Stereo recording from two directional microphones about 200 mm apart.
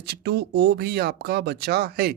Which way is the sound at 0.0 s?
55° right (ahead or behind).